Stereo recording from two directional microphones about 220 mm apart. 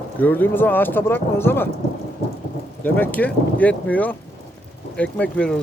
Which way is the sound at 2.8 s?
10° left (ahead or behind).